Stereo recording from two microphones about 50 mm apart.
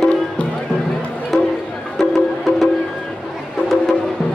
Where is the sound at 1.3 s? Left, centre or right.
Centre.